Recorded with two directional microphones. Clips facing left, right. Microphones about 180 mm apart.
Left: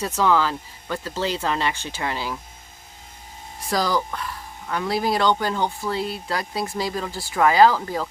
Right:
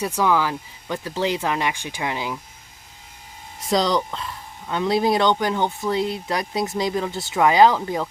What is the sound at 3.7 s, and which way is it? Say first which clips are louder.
Speech: right 3 dB; 20° right (ahead or behind).